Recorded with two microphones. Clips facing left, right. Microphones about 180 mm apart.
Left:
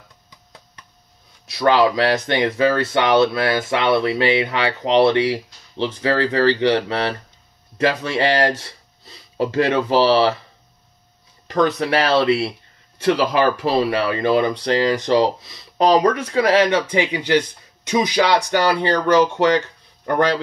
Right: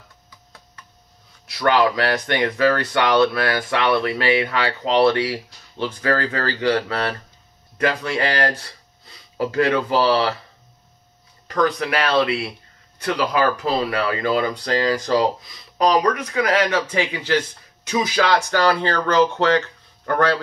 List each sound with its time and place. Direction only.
1.4 s speech: 20° left (ahead or behind)
11.4 s speech: 25° left (ahead or behind)